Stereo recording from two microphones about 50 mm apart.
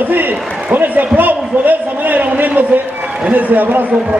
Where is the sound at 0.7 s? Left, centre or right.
Right.